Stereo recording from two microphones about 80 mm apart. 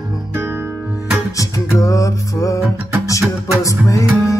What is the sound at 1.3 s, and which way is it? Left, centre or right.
Music, left.